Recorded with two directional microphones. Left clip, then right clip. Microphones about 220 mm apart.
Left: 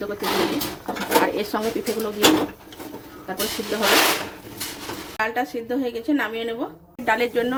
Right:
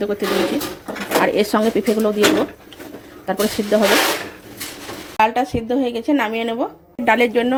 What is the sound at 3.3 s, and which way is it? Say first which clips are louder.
Speech: right 8 dB; 30° right (ahead or behind).